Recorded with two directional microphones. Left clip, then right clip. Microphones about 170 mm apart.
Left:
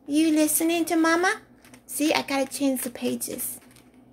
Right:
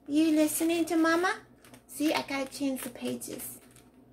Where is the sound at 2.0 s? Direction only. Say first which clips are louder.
Left 6 dB; 55° left (ahead or behind).